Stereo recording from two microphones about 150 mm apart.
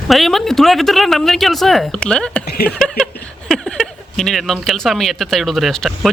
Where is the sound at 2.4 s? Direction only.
90° left.